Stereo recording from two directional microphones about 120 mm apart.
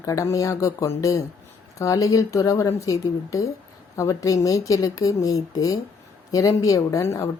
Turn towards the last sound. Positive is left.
turn(degrees=25)  # may be behind; listen again after turning